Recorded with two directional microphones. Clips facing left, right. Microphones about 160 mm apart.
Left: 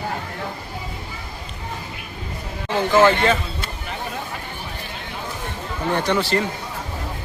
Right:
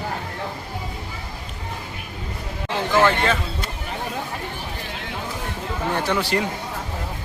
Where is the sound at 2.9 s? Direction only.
Centre (ahead or behind).